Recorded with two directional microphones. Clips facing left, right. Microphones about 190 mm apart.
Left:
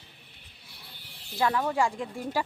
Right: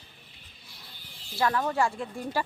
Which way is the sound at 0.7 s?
65° left (ahead or behind).